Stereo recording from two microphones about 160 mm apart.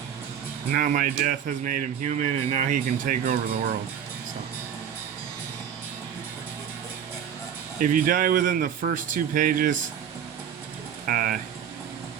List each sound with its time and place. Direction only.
0.7 s speech: 55° right (ahead or behind)
7.8 s speech: 60° right (ahead or behind)
11.0 s speech: 60° right (ahead or behind)